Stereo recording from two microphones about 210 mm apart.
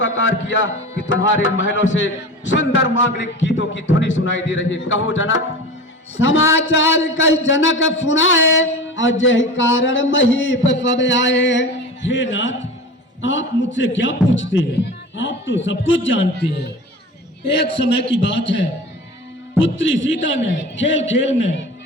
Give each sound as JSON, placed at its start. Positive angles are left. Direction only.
{"t": 0.0, "sound": "a man's voice", "side_deg": 60}
{"t": 6.5, "sound": "a man's voice", "side_deg": 65}
{"t": 19.5, "sound": "a man's voice", "side_deg": 65}